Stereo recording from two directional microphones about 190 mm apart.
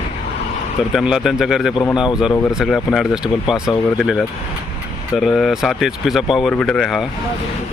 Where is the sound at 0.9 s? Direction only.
5° right (ahead or behind).